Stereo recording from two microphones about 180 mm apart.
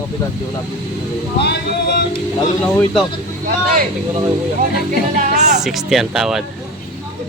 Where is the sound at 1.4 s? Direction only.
65° left (ahead or behind).